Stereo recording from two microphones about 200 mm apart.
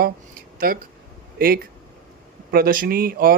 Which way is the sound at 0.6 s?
50° right (ahead or behind).